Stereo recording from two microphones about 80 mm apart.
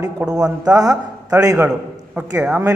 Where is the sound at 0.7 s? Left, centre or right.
Right.